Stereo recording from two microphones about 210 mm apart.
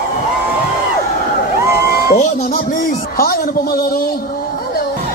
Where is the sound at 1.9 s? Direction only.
40° left (ahead or behind).